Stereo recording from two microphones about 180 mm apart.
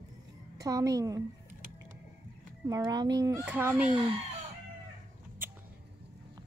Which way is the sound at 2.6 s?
20° right (ahead or behind).